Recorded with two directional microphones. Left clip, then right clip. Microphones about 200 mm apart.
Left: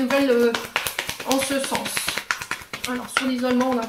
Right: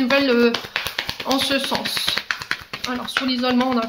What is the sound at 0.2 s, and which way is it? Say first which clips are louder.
Speech: right 1 dB; 35° right (ahead or behind).